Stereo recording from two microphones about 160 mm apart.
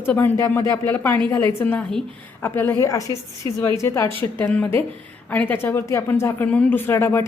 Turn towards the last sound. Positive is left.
turn(degrees=15)  # may be behind; listen again after turning